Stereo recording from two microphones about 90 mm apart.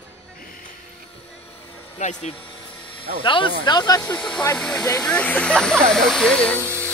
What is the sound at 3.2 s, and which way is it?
Speech, 65° left (ahead or behind).